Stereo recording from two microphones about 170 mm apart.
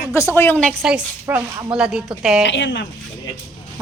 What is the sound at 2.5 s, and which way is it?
Speech, 90° left.